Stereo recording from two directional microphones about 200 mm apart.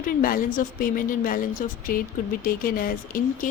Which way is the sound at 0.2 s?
45° left (ahead or behind).